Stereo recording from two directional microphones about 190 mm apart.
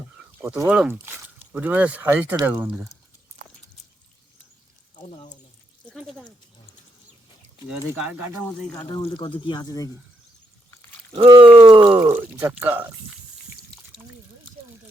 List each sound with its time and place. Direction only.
0.4 s speech: 10° right (ahead or behind)
5.9 s a sound: centre (ahead or behind)
7.7 s speech: 5° right (ahead or behind)
8.7 s speech: 25° left (ahead or behind)
11.1 s speech: 25° right (ahead or behind)
11.9 s speech: 10° right (ahead or behind)